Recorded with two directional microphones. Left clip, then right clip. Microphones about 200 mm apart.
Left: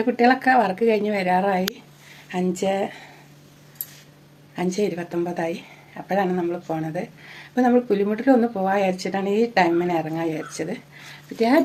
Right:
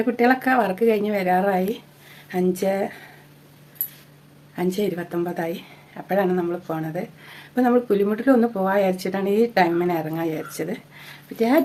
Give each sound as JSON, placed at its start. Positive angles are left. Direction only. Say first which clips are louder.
{"t": 0.0, "sound": "speech", "louder": "left 1 dB", "side_deg": -10}
{"t": 4.5, "sound": "speech", "louder": "even", "side_deg": -10}